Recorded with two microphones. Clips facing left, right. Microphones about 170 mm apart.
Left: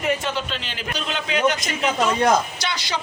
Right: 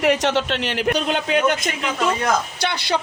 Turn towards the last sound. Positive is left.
turn(degrees=-60)  # may be behind; listen again after turning